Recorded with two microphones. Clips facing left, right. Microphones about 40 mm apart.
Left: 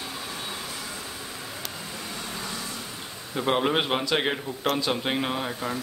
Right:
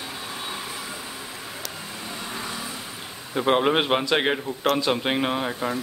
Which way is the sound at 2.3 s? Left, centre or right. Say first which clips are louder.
Right 3 dB; centre.